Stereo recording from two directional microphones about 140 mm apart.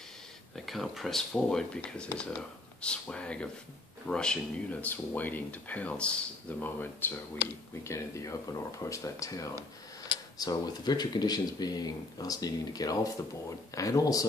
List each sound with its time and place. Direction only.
0.7 s speech: centre (ahead or behind); by 14.2 s 25° left (ahead or behind)